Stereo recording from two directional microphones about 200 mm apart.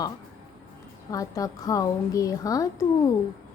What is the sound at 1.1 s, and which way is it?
Music, 15° left (ahead or behind).